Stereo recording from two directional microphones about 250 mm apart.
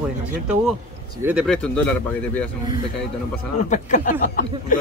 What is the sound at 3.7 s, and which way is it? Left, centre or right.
Speech, left.